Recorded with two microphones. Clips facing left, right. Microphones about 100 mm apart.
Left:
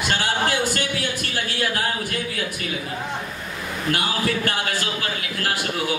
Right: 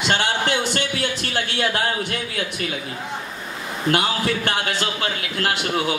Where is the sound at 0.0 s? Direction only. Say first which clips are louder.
Right 1 dB; 25° right (ahead or behind).